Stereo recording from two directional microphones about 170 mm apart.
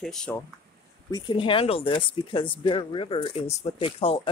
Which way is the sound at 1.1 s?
25° left (ahead or behind).